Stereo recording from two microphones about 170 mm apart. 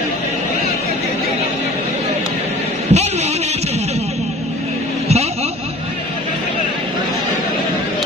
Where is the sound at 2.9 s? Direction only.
40° right (ahead or behind).